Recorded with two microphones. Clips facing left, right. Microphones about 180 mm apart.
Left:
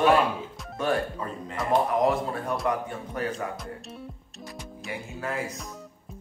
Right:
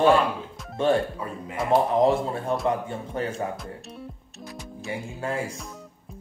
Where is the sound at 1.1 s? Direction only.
5° right (ahead or behind).